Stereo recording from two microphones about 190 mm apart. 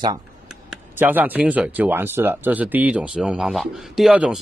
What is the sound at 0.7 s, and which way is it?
Speech, 10° right (ahead or behind).